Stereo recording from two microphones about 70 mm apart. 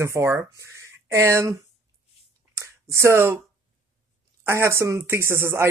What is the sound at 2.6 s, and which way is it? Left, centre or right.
Speech, right.